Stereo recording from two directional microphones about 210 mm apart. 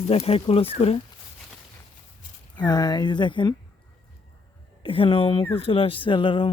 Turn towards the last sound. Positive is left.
turn(degrees=25)  # may be behind; listen again after turning